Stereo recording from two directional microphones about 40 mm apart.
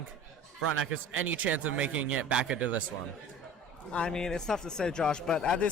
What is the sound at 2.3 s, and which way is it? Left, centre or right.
Speech, right.